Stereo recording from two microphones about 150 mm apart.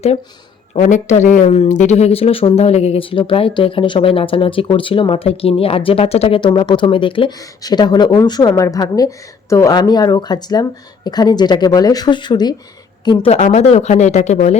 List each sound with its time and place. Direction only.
0.8 s speech: 55° left (ahead or behind); by 12.5 s 30° left (ahead or behind)
13.1 s speech: 45° left (ahead or behind)